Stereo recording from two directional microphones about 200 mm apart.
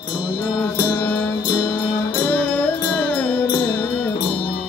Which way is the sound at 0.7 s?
20° left (ahead or behind).